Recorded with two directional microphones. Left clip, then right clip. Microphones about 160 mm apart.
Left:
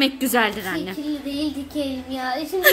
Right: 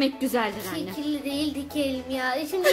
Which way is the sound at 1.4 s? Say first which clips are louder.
Left 2 dB; 35° right (ahead or behind).